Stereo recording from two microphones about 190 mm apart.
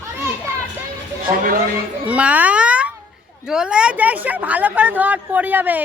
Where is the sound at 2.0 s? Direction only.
5° right (ahead or behind).